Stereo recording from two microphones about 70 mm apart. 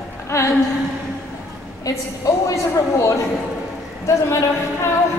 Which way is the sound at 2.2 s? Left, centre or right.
Left.